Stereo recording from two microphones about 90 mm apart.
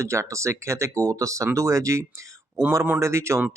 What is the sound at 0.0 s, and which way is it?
Speech, 35° right (ahead or behind).